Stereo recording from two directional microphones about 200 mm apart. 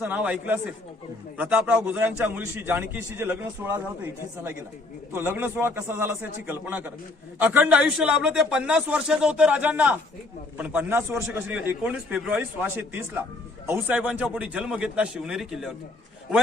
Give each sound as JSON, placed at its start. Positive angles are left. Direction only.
{"t": 0.0, "sound": "a man's voice", "side_deg": -5}
{"t": 5.1, "sound": "a man's voice", "side_deg": -10}